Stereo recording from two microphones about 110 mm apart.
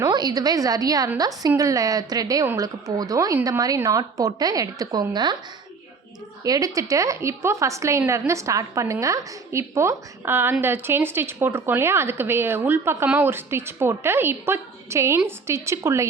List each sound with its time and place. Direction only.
0.0 s a woman's voice: 40° right (ahead or behind)
6.4 s a woman's voice: 30° right (ahead or behind)